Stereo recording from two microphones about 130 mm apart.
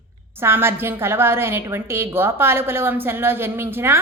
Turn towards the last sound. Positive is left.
turn(degrees=-20)  # may be behind; listen again after turning